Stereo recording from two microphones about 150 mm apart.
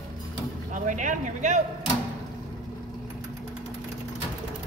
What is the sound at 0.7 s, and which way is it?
Speech, 55° right (ahead or behind).